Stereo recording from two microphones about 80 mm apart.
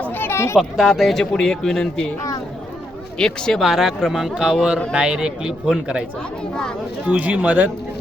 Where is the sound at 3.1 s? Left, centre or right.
Centre.